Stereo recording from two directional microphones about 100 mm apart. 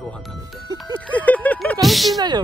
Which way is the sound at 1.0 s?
15° left (ahead or behind).